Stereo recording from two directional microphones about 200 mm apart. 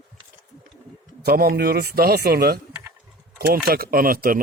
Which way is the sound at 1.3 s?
50° right (ahead or behind).